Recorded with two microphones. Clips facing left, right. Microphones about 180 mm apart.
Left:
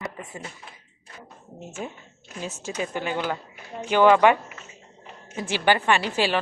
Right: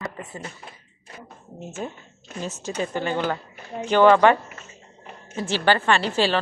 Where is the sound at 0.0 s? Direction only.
5° left (ahead or behind).